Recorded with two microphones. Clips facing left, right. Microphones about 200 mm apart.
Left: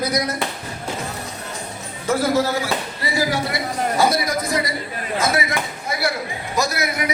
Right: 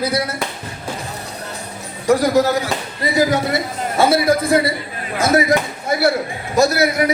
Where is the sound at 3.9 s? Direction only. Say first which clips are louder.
Right 6 dB; 25° right (ahead or behind).